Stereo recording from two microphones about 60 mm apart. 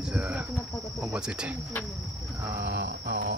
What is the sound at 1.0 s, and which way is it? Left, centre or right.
Speech, centre.